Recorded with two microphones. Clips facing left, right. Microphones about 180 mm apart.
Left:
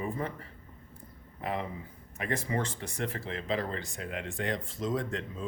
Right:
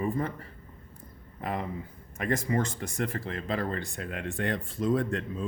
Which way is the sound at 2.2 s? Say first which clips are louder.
Right 4 dB; 45° right (ahead or behind).